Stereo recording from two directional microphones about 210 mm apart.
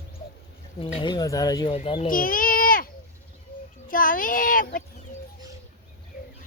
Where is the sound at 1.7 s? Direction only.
25° left (ahead or behind).